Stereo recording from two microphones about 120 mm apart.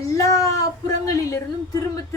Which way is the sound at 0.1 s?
30° left (ahead or behind).